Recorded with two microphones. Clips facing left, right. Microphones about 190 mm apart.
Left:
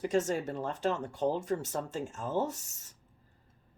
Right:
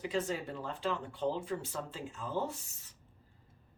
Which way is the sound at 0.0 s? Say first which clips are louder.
Left 5 dB; 45° left (ahead or behind).